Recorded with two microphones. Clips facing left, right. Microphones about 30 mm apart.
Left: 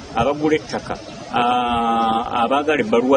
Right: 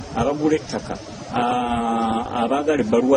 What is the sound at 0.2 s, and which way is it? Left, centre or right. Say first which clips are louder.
A man's voice: left 2 dB; left.